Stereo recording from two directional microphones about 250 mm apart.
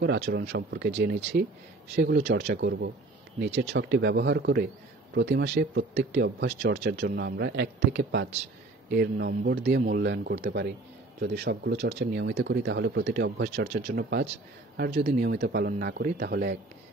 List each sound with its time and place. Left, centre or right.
0.0 s a man's voice: right